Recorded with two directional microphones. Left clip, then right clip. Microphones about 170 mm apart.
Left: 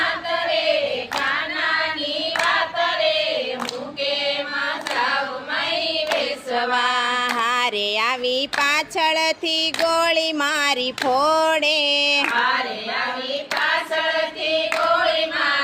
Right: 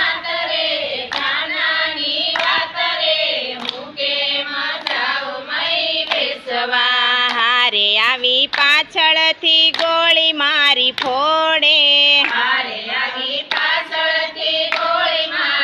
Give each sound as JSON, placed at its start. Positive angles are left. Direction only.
{"t": 6.7, "sound": "female singing", "side_deg": 20}
{"t": 9.8, "sound": "a sound", "side_deg": 15}
{"t": 11.2, "sound": "music", "side_deg": 15}